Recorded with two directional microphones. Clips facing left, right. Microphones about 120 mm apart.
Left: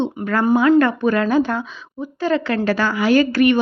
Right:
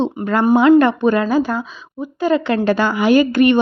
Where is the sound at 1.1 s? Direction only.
5° right (ahead or behind).